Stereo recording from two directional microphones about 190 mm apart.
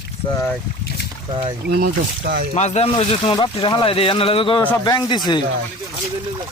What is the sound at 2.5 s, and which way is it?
Speech, 35° left (ahead or behind).